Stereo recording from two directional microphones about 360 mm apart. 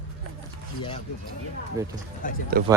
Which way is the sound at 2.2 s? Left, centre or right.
Left.